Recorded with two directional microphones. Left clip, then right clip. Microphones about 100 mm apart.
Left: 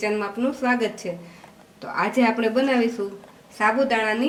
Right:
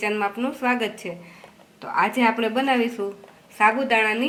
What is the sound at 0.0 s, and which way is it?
A woman's voice, 20° right (ahead or behind).